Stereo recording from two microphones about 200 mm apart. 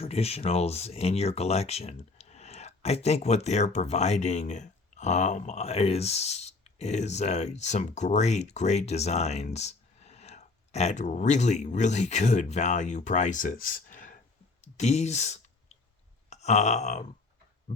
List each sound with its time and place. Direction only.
0.0 s speech: 30° left (ahead or behind)
14.6 s clicking: 35° left (ahead or behind)
16.3 s a sound: 35° left (ahead or behind)